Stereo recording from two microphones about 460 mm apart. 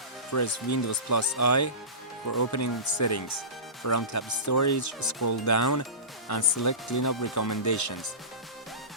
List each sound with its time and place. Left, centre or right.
0.3 s speech: left